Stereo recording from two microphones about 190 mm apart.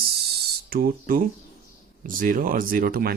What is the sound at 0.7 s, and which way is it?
Speech, 50° right (ahead or behind).